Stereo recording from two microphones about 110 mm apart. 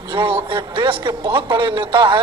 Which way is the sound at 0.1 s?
50° right (ahead or behind).